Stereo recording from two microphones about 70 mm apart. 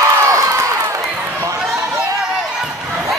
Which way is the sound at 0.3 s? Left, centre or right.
Right.